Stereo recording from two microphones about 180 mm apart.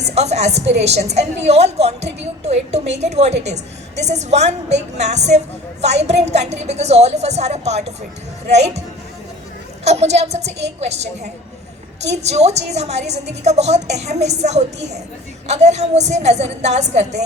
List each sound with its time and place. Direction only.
0.0 s a woman's voice: 40° right (ahead or behind)
9.8 s a woman's voice: 35° right (ahead or behind)
12.1 s a woman's voice: 40° right (ahead or behind)